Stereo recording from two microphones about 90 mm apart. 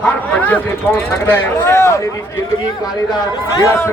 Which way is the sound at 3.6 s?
30° left (ahead or behind).